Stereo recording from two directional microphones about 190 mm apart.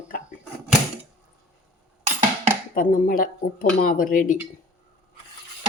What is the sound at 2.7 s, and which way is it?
Speech, 45° left (ahead or behind).